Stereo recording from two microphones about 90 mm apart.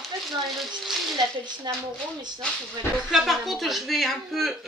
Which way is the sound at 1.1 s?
50° right (ahead or behind).